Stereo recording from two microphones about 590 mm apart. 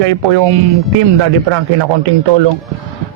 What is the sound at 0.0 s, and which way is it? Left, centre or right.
Speech, right.